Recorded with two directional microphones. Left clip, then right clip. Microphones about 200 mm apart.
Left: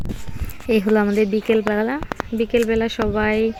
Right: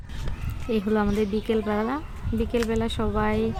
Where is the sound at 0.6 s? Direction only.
25° left (ahead or behind).